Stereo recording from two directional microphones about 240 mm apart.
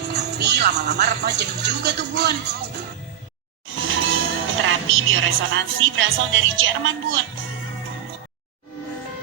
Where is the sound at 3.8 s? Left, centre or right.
Right.